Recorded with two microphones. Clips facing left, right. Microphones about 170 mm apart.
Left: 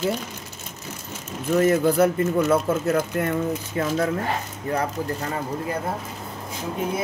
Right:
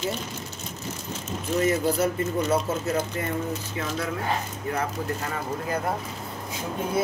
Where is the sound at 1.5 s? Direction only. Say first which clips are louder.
Left 5 dB; 55° left (ahead or behind).